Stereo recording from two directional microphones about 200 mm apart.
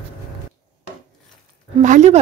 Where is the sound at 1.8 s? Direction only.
35° right (ahead or behind).